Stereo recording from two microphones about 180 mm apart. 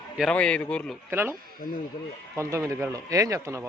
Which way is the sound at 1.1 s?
15° right (ahead or behind).